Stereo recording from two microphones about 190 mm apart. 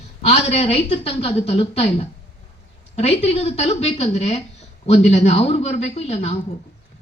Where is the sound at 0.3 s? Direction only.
35° left (ahead or behind).